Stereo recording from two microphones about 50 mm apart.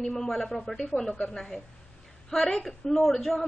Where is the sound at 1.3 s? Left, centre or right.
Centre.